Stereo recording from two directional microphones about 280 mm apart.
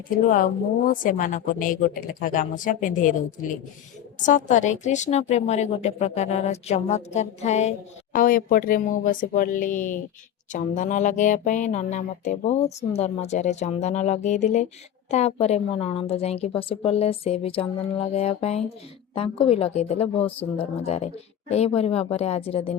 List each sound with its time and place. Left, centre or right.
0.9 s a woman's voice: left
4.2 s a woman's voice: left